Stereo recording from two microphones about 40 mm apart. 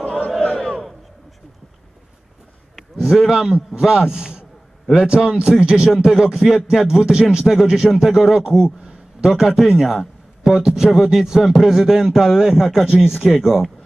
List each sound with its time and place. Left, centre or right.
0.0 s a sound: left
0.6 s crowd: centre
3.0 s a man's voice: centre